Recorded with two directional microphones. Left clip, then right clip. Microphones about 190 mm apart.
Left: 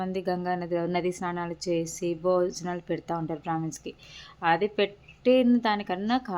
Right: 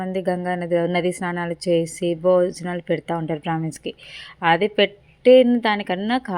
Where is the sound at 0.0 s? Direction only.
20° right (ahead or behind).